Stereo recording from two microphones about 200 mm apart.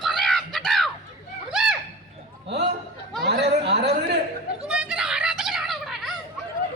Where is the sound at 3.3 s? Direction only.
60° right (ahead or behind).